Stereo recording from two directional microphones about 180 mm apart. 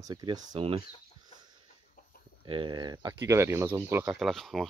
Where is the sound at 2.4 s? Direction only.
25° right (ahead or behind).